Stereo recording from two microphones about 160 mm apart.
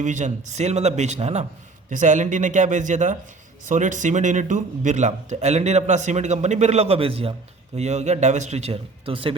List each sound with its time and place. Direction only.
0.0 s a man's voice: 50° right (ahead or behind); by 9.3 s 35° right (ahead or behind)